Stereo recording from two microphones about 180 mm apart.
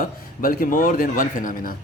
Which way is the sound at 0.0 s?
50° left (ahead or behind).